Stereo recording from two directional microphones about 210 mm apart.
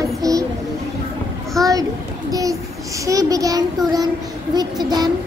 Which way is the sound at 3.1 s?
15° right (ahead or behind).